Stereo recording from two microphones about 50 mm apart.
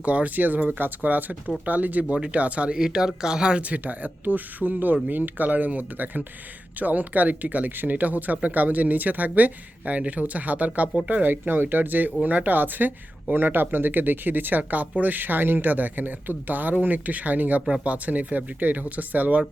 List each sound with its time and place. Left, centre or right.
0.0 s speech: right
2.7 s speech: centre
3.6 s speech: right